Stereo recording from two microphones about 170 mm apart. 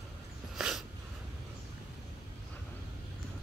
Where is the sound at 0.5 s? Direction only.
5° right (ahead or behind).